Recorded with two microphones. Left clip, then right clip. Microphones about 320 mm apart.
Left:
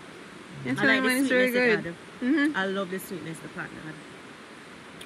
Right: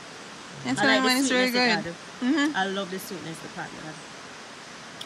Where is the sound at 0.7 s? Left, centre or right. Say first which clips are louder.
Right 2 dB; centre.